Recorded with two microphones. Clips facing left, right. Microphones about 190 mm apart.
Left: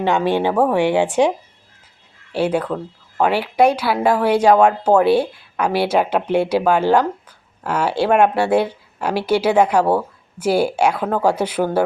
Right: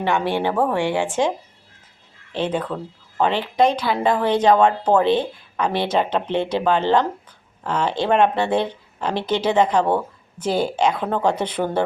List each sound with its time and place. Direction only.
0.0 s speech: 15° left (ahead or behind)
2.3 s speech: 10° left (ahead or behind)